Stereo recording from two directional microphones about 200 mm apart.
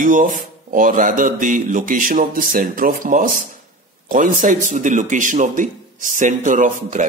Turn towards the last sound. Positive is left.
turn(degrees=-40)  # may be behind; listen again after turning